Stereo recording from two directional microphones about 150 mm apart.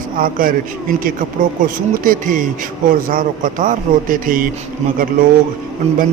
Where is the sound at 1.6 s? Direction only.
60° right (ahead or behind).